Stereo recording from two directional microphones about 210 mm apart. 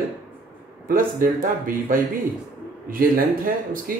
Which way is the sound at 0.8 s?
40° right (ahead or behind).